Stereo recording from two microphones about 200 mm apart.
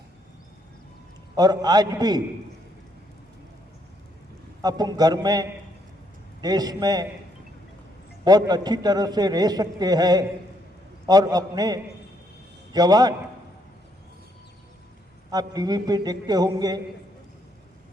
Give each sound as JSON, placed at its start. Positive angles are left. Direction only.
{"t": 1.4, "sound": "a man's voice", "side_deg": -20}
{"t": 4.6, "sound": "a man's voice", "side_deg": -20}
{"t": 8.2, "sound": "a man's voice", "side_deg": -20}
{"t": 15.3, "sound": "a man's voice", "side_deg": -20}